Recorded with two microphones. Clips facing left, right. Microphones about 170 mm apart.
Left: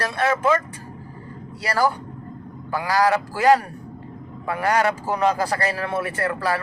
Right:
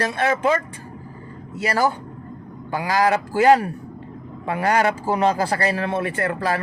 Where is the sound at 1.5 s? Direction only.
20° right (ahead or behind).